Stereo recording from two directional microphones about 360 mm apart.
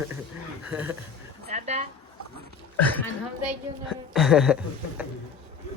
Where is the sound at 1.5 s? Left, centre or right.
Centre.